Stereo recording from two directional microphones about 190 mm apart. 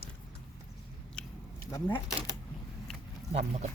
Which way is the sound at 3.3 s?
35° right (ahead or behind).